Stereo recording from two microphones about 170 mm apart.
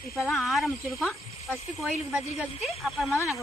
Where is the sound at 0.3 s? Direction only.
Centre (ahead or behind).